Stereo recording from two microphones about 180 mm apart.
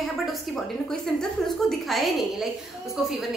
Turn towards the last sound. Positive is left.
turn(degrees=0)  # may be behind; listen again after turning